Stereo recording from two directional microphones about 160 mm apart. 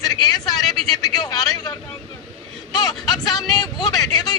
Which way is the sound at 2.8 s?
25° left (ahead or behind).